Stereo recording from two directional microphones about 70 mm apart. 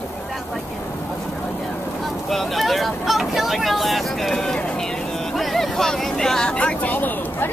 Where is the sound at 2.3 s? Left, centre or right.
Centre.